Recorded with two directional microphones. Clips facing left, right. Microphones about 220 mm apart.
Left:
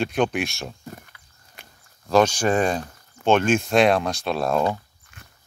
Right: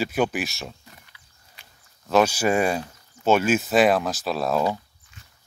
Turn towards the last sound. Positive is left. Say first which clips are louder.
# left 3 dB
turn(degrees=55)  # may be behind; listen again after turning